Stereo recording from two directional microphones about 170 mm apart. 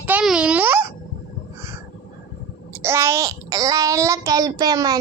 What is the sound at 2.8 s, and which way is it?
A child's voice, 15° right (ahead or behind).